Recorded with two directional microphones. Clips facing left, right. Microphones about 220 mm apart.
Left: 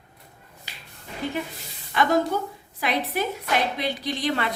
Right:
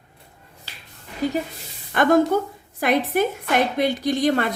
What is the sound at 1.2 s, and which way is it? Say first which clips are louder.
Speech: right 7 dB; 40° right (ahead or behind).